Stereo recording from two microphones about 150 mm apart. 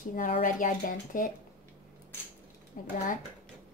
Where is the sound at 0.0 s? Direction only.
65° left (ahead or behind).